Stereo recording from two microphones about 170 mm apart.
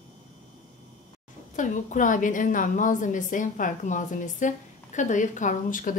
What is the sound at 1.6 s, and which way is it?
A woman's voice, 50° left (ahead or behind).